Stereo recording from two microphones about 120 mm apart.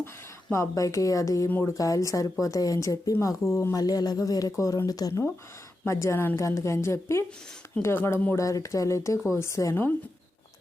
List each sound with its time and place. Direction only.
0.5 s a woman's voice: 25° left (ahead or behind)
1.5 s speech: 15° left (ahead or behind)
1.7 s a woman's voice: 30° left (ahead or behind)